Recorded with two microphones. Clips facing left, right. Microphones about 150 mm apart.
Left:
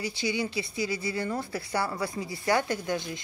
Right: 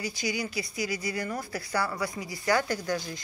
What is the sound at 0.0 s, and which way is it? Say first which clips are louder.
Speech: left 2 dB; 30° left (ahead or behind).